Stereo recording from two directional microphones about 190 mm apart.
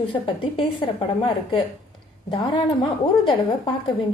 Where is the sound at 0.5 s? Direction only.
30° left (ahead or behind).